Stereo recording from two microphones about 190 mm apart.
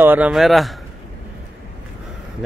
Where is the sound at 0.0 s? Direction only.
10° right (ahead or behind).